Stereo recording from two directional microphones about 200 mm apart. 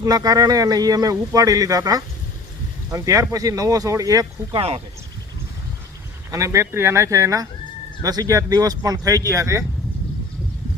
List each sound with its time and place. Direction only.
0.0 s speech: 20° right (ahead or behind)
6.3 s speech: 15° right (ahead or behind)